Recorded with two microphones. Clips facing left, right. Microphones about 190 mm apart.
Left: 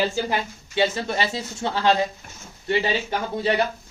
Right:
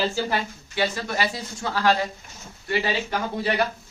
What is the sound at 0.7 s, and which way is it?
Speech, 25° left (ahead or behind).